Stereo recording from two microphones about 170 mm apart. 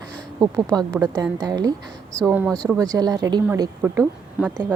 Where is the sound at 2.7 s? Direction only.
20° right (ahead or behind).